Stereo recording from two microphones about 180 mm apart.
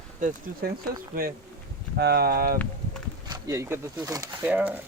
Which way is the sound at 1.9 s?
60° right (ahead or behind).